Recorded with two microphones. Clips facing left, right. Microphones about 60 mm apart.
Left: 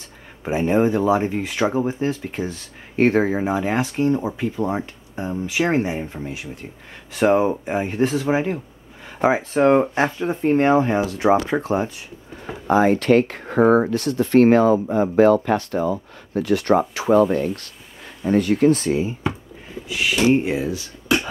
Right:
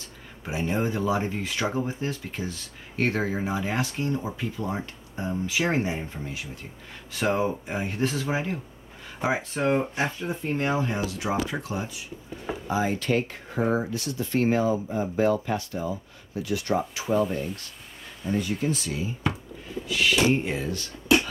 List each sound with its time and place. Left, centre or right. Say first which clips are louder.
0.4 s speech: left 9 dB; left
9.5 s speech: left 9 dB; left
12.6 s speech: left 11 dB; left
18.8 s speech: left 10 dB; left
19.9 s speech: left 4 dB; centre